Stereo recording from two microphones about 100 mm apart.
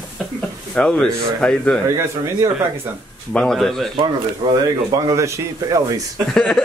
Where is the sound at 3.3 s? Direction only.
5° left (ahead or behind).